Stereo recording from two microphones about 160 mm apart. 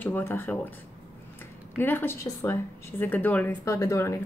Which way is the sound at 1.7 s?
15° left (ahead or behind).